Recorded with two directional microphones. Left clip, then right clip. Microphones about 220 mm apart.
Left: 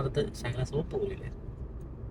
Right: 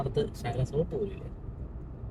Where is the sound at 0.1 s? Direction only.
40° left (ahead or behind).